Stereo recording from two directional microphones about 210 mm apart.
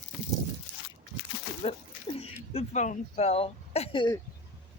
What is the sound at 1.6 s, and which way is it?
Speech, 25° left (ahead or behind).